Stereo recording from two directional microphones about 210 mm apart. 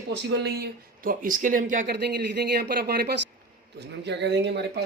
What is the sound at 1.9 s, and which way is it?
Speech, 55° right (ahead or behind).